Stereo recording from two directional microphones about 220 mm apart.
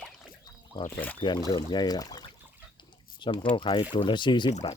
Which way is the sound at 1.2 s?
20° left (ahead or behind).